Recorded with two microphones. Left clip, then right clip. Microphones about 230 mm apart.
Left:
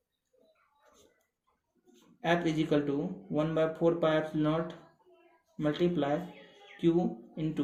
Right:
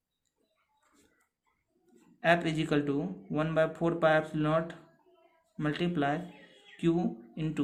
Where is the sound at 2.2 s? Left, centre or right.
Right.